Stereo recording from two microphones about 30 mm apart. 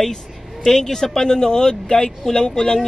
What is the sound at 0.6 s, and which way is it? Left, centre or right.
Speech, centre.